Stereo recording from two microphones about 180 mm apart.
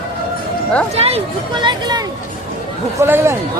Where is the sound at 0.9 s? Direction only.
35° right (ahead or behind).